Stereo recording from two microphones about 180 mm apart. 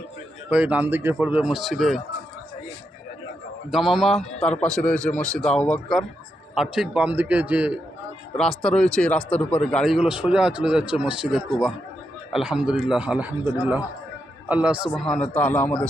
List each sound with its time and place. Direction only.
0.5 s a man's voice: 10° right (ahead or behind)
3.7 s a man's voice: centre (ahead or behind)
8.4 s a man's voice: 5° left (ahead or behind)